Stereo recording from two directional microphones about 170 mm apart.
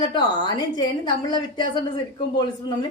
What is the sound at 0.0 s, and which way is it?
A woman's voice, 25° left (ahead or behind).